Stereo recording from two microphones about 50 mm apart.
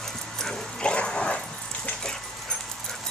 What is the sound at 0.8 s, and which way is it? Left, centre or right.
Dog, left.